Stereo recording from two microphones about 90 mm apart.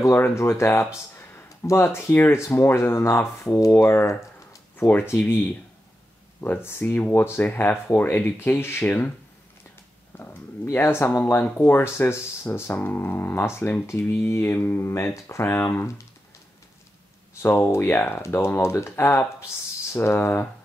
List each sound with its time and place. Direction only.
0.0 s speech: 30° left (ahead or behind)
10.1 s a sound: 25° left (ahead or behind)
11.1 s speech: 25° left (ahead or behind)
17.4 s speech: 30° left (ahead or behind)